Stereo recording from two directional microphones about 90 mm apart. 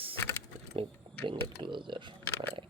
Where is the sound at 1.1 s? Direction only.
75° right (ahead or behind).